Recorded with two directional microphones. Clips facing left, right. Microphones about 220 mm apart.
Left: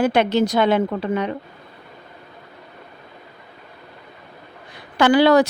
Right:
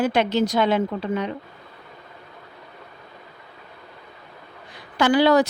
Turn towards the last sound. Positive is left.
turn(degrees=70)  # may be behind; listen again after turning